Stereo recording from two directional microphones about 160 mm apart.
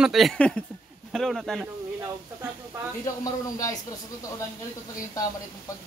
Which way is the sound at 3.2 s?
20° left (ahead or behind).